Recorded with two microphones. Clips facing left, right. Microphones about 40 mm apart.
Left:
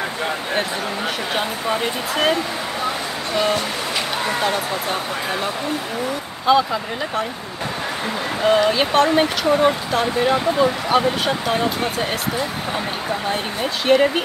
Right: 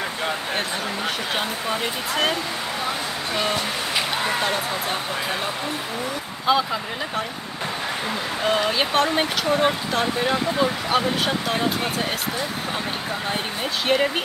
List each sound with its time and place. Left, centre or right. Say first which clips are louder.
1.3 s speech: left 3 dB; centre
3.3 s speech: left 5 dB; centre
6.4 s speech: left 4 dB; centre
8.4 s speech: left 6 dB; centre
13.3 s speech: left 3 dB; centre